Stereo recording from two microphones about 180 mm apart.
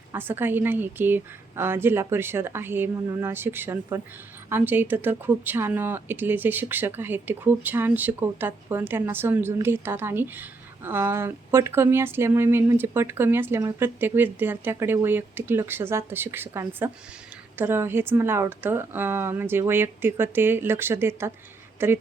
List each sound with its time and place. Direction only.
0.1 s speech: 10° right (ahead or behind)